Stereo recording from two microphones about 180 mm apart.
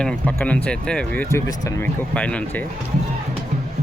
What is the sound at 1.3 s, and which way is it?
Speech, 15° left (ahead or behind).